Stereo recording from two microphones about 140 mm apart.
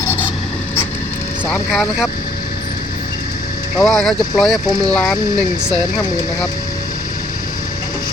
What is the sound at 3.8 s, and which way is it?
Speech, centre (ahead or behind).